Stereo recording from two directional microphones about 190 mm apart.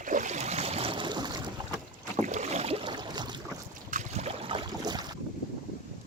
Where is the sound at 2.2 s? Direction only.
40° right (ahead or behind); by 3.4 s 20° right (ahead or behind).